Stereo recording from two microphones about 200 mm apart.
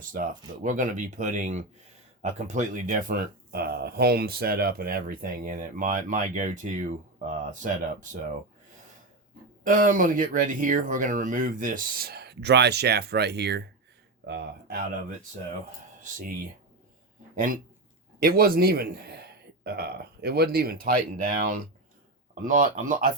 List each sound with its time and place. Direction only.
0.1 s speech: 40° right (ahead or behind)
9.6 s speech: 40° right (ahead or behind)
17.3 s speech: 45° right (ahead or behind)